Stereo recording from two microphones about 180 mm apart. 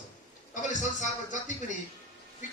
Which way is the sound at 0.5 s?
45° left (ahead or behind).